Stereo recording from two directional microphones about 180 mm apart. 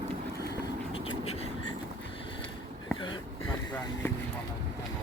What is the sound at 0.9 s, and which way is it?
Writing, 30° left (ahead or behind).